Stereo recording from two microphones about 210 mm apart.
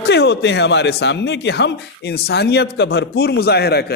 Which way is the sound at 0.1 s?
55° left (ahead or behind).